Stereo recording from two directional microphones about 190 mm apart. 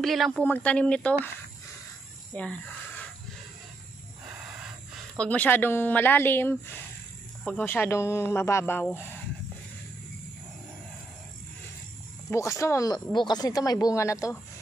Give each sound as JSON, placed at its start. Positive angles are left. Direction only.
{"t": 0.0, "sound": "a woman's voice", "side_deg": 0}
{"t": 2.3, "sound": "speech", "side_deg": 10}
{"t": 5.1, "sound": "speech", "side_deg": 5}
{"t": 12.3, "sound": "speech", "side_deg": 15}